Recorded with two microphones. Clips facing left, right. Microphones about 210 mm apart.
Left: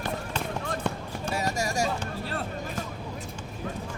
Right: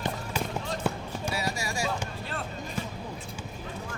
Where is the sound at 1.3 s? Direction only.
45° left (ahead or behind).